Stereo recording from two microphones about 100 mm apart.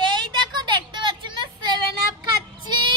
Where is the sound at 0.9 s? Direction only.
50° right (ahead or behind).